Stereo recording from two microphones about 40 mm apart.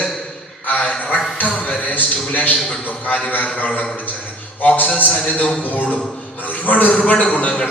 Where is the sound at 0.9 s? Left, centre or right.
Left.